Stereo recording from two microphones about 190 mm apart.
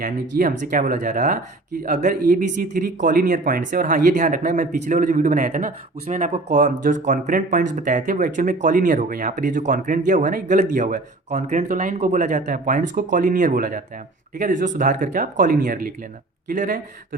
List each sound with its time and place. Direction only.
0.0 s speech: 45° right (ahead or behind)